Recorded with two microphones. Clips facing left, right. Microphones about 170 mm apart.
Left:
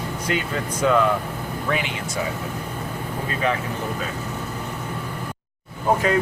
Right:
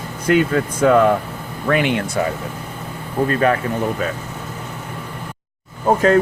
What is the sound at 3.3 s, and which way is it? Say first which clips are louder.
Speech: right 6 dB; 55° right (ahead or behind).